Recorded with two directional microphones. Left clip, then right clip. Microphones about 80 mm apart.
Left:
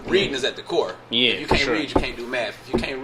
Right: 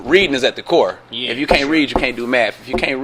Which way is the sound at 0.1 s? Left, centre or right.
Right.